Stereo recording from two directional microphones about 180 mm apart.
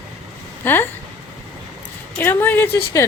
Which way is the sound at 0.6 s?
10° left (ahead or behind).